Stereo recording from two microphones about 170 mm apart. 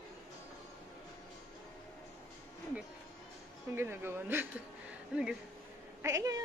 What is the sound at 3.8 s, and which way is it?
Speech, 15° right (ahead or behind).